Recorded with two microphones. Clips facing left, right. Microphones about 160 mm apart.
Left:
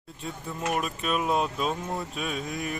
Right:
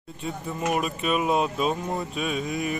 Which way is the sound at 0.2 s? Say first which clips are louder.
Right 4 dB; 5° right (ahead or behind).